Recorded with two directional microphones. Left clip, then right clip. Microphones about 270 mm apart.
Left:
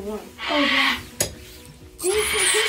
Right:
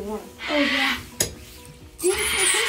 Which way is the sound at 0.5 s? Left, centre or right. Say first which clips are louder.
Left 2 dB; centre.